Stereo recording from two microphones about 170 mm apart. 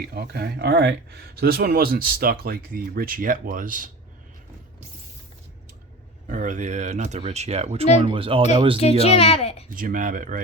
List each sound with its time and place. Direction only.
0.0 s speech: 70° right (ahead or behind)
6.2 s speech: 50° right (ahead or behind); by 8.8 s 30° right (ahead or behind)
8.8 s a child's voice: 35° left (ahead or behind)
9.7 s speech: 55° right (ahead or behind)